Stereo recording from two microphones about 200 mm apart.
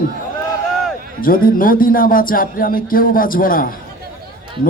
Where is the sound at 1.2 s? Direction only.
45° left (ahead or behind).